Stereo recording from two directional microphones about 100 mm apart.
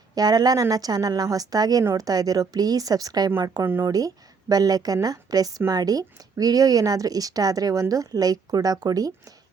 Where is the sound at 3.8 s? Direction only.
40° right (ahead or behind).